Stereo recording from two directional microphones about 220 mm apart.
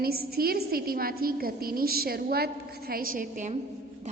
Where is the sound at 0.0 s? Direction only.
45° right (ahead or behind).